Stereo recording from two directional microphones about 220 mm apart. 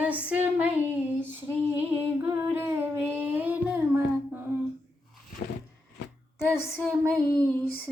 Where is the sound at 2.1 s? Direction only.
10° right (ahead or behind).